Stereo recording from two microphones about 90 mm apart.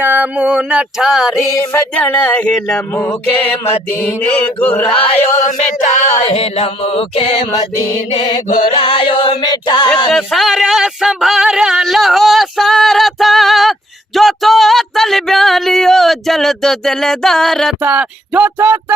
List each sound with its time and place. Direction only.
0.0 s a sound: 20° right (ahead or behind)
2.0 s mantra: 15° left (ahead or behind)
4.0 s mantra: 10° left (ahead or behind)
4.9 s mantra: 90° left
6.2 s mantra: 90° left
8.3 s music: 80° left; by 9.9 s 50° left (ahead or behind)
10.1 s a sound: centre (ahead or behind)
17.8 s a sound: 15° right (ahead or behind)
18.6 s speech: 25° right (ahead or behind)